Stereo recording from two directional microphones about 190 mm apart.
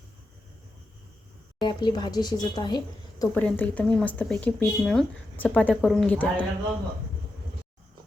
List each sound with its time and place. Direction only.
1.5 s a woman's voice: 25° left (ahead or behind)
3.3 s speech: 10° left (ahead or behind)